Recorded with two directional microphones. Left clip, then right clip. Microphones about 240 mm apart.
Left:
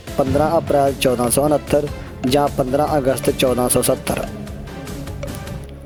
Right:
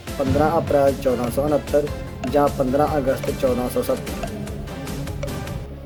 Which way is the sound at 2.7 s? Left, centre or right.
Left.